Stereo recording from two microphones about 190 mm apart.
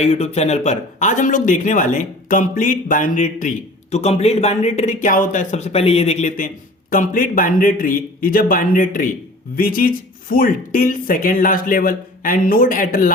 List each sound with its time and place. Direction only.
0.0 s speech: 35° left (ahead or behind)